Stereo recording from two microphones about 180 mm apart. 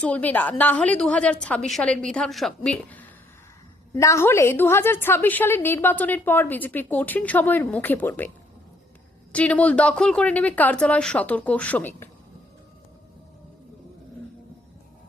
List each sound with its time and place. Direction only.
0.0 s a woman's voice: 10° left (ahead or behind)
9.3 s a woman's voice: 5° left (ahead or behind)